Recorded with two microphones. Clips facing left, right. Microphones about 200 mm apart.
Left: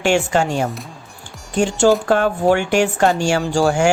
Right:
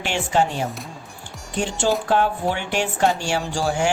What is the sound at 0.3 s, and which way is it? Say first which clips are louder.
Speech: left 3 dB; 45° left (ahead or behind).